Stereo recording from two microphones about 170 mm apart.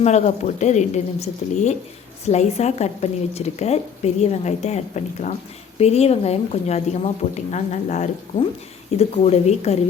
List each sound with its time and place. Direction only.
0.0 s a woman's voice: 40° left (ahead or behind)